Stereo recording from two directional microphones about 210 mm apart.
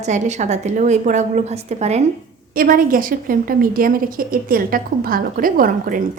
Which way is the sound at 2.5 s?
45° right (ahead or behind).